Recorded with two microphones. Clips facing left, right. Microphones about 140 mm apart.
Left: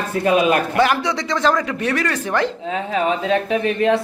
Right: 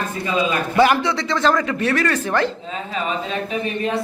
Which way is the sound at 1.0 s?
15° left (ahead or behind).